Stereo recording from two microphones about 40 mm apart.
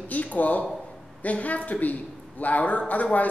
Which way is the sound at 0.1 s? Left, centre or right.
Left.